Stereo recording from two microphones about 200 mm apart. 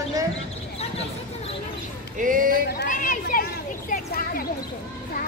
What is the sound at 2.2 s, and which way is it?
Speech, 45° right (ahead or behind).